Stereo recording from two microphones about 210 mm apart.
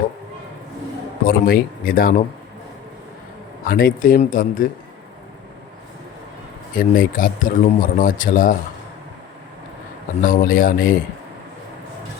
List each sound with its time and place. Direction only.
1.2 s speech: 45° left (ahead or behind)
3.7 s speech: 45° left (ahead or behind)
6.7 s speech: 40° left (ahead or behind)
10.2 s speech: 40° left (ahead or behind)